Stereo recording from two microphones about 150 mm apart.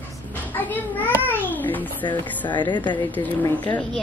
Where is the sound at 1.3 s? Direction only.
10° left (ahead or behind).